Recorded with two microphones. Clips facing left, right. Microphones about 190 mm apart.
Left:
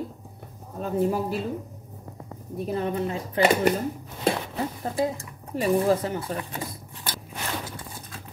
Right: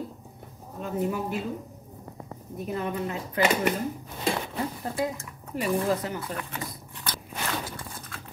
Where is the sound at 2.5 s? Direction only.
30° left (ahead or behind).